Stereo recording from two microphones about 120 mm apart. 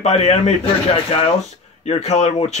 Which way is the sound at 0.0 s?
60° left (ahead or behind).